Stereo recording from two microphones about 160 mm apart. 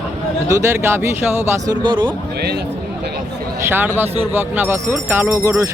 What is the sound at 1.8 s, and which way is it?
Speech, 30° right (ahead or behind).